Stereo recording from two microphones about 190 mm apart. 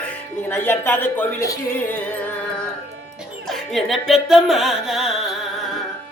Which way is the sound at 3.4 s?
Centre (ahead or behind).